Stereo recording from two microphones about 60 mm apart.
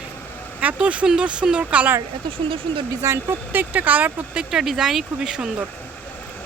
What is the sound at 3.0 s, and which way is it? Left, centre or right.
Speech, right.